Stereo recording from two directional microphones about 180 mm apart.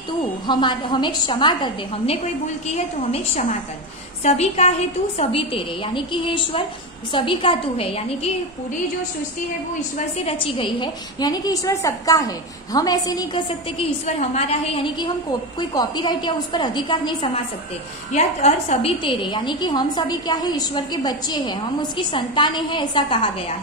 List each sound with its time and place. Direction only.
0.5 s a woman's voice: 25° left (ahead or behind)
2.4 s a woman's voice: 40° left (ahead or behind)
9.9 s a woman's voice: 30° left (ahead or behind)
14.0 s a woman's voice: 35° left (ahead or behind)
18.1 s a woman's voice: 40° left (ahead or behind)